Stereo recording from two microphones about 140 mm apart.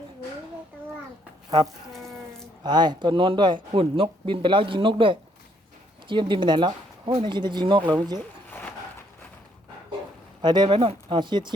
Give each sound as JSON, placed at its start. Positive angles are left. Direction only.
{"t": 2.6, "sound": "speech", "side_deg": -30}
{"t": 8.4, "sound": "a sound", "side_deg": 15}
{"t": 10.4, "sound": "speech", "side_deg": -30}